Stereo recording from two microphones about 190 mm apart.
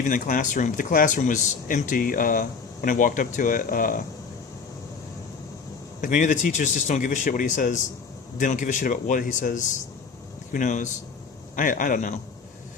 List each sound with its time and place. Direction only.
0.0 s speech: 45° left (ahead or behind)
6.0 s speech: 40° left (ahead or behind)